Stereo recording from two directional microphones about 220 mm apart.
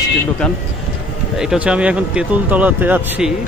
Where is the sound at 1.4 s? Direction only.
5° right (ahead or behind).